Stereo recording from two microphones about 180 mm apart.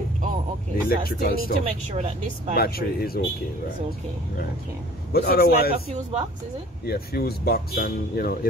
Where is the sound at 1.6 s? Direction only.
40° right (ahead or behind).